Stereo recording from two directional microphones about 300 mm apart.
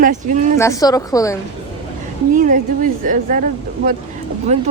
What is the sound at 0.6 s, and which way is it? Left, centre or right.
Speech, centre.